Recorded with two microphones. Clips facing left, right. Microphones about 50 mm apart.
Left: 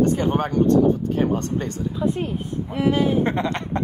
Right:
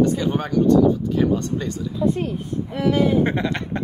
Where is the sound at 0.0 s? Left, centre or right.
Left.